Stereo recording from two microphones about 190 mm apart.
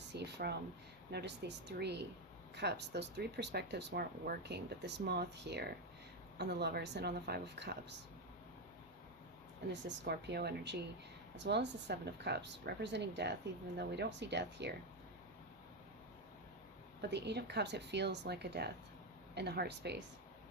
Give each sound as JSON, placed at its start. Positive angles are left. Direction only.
{"t": 0.1, "sound": "a sound", "side_deg": -60}
{"t": 1.1, "sound": "speech", "side_deg": -65}
{"t": 10.1, "sound": "speech", "side_deg": -60}
{"t": 17.0, "sound": "speech", "side_deg": -65}